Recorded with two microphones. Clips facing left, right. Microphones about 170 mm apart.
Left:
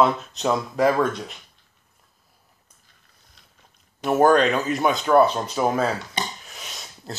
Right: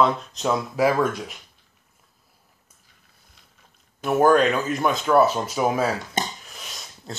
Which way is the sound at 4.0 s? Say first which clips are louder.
Even; centre (ahead or behind).